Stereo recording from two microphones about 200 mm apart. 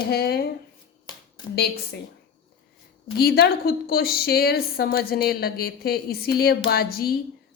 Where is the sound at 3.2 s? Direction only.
50° left (ahead or behind).